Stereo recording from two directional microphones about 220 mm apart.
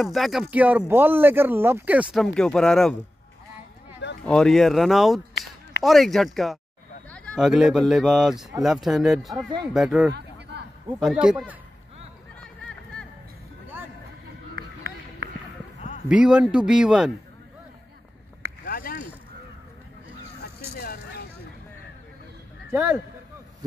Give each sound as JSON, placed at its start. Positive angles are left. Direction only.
{"t": 0.0, "sound": "speech", "side_deg": 0}
{"t": 4.3, "sound": "speech", "side_deg": 5}
{"t": 12.4, "sound": "music", "side_deg": 5}
{"t": 14.5, "sound": "run", "side_deg": -45}
{"t": 16.1, "sound": "speech", "side_deg": -5}
{"t": 18.7, "sound": "a sound", "side_deg": 45}
{"t": 20.7, "sound": "a sound", "side_deg": 45}
{"t": 22.7, "sound": "speech", "side_deg": -10}